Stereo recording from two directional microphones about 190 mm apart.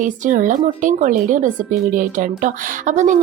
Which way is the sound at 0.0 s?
45° right (ahead or behind).